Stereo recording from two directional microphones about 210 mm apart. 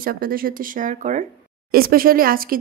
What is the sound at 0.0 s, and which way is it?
A woman's voice, 45° right (ahead or behind).